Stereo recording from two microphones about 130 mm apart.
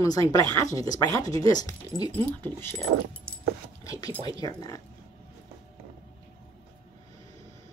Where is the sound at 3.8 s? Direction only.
25° left (ahead or behind).